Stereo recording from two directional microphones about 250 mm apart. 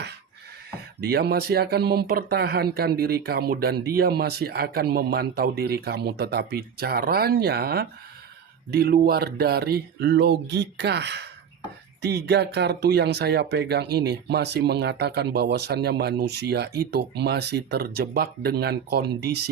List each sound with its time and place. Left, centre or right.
1.0 s speech: right